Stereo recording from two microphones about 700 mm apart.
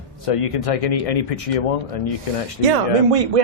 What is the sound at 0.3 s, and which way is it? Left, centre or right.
Speech, left.